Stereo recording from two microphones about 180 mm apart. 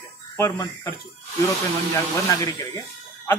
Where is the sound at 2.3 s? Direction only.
20° left (ahead or behind).